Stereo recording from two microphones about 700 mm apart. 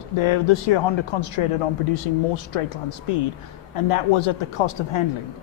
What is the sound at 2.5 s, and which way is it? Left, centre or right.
Speech, left.